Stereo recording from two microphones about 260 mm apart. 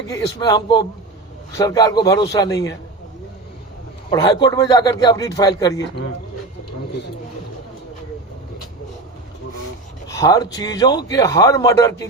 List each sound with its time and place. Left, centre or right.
0.1 s a man's voice: centre
4.1 s a man's voice: centre
10.1 s a man's voice: centre